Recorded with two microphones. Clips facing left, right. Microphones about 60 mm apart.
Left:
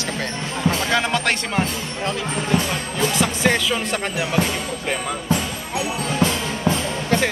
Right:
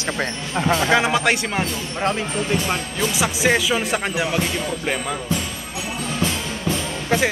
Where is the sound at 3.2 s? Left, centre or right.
Centre.